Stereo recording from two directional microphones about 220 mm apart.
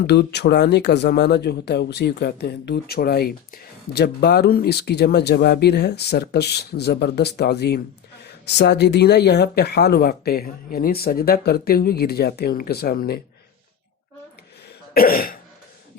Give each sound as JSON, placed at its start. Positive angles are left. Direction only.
{"t": 0.1, "sound": "speech", "side_deg": 50}
{"t": 14.9, "sound": "cough", "side_deg": 40}